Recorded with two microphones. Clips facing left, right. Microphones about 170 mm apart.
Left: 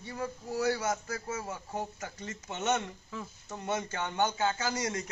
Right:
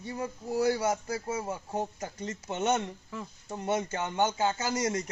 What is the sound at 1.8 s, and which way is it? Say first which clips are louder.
Speech: right 4 dB; 35° right (ahead or behind).